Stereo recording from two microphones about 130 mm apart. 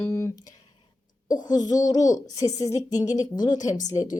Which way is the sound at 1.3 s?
30° left (ahead or behind).